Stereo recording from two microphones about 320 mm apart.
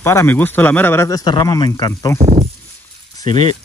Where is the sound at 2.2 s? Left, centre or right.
Centre.